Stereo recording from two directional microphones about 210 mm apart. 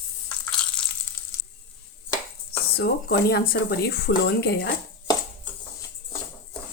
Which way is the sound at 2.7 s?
50° left (ahead or behind).